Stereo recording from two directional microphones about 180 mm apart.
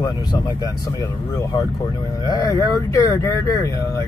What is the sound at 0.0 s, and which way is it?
Speech, 25° left (ahead or behind).